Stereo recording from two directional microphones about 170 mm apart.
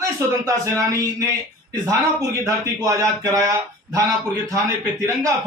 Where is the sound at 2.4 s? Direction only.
20° right (ahead or behind).